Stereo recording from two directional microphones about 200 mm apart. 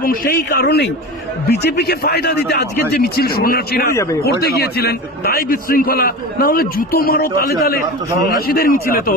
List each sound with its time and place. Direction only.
0.0 s a man's voice: 45° left (ahead or behind)
3.9 s speech: 15° left (ahead or behind)
4.2 s a man's voice: 50° left (ahead or behind)
8.5 s a man's voice: 50° left (ahead or behind)